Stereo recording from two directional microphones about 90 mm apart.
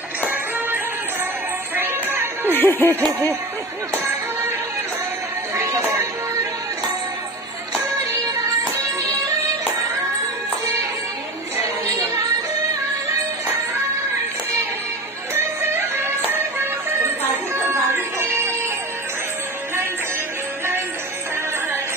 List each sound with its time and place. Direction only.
1.8 s music: 25° right (ahead or behind)
2.5 s music: 20° left (ahead or behind)
5.5 s a sound: 30° right (ahead or behind)
15.3 s music: 25° right (ahead or behind)
17.9 s music: 30° right (ahead or behind)